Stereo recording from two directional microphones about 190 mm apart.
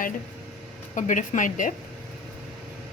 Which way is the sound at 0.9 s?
40° left (ahead or behind).